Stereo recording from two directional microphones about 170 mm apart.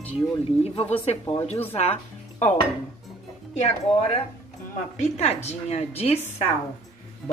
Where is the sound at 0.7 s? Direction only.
35° left (ahead or behind).